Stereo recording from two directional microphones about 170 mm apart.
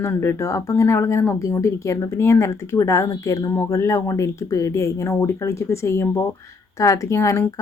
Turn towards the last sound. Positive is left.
turn(degrees=15)  # may be behind; listen again after turning